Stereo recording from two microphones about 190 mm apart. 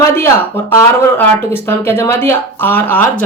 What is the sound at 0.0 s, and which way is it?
A woman's voice, 15° left (ahead or behind).